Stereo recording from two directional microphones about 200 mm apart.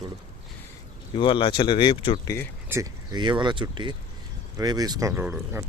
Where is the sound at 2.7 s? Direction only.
15° right (ahead or behind).